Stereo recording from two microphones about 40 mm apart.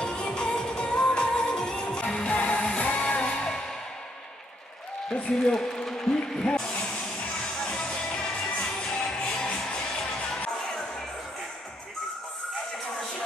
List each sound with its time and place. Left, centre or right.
0.0 s music: left
5.1 s a man's voice: left
7.3 s music: centre